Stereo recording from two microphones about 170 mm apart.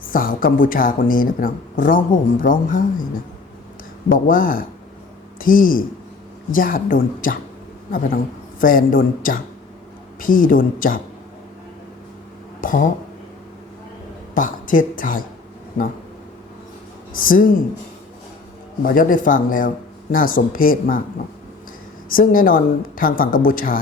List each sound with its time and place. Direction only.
0.0 s speech: 55° left (ahead or behind)
4.3 s speech: 55° left (ahead or behind)
12.6 s speech: 50° left (ahead or behind)
14.3 s speech: 50° left (ahead or behind)
17.2 s speech: 55° left (ahead or behind)
18.8 s speech: 55° left (ahead or behind)
22.1 s speech: 55° left (ahead or behind)